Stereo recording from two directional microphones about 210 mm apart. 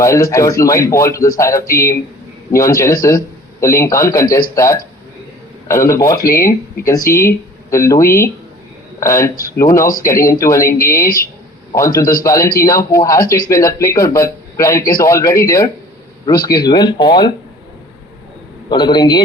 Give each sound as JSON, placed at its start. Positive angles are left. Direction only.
{"t": 0.0, "sound": "speech", "side_deg": 15}
{"t": 18.7, "sound": "speech", "side_deg": 20}